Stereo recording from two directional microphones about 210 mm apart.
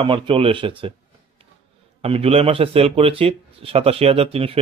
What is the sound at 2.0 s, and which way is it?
Speech, 30° right (ahead or behind).